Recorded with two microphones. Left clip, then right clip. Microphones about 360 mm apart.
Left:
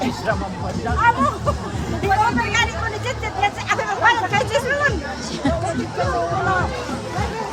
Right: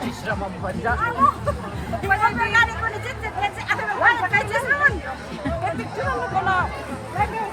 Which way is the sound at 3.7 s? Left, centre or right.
Centre.